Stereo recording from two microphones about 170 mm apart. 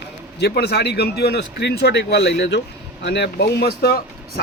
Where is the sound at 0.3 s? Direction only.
75° left (ahead or behind); by 2.6 s 90° left.